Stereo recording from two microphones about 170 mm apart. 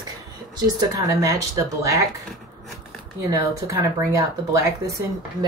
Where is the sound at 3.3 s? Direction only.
20° right (ahead or behind).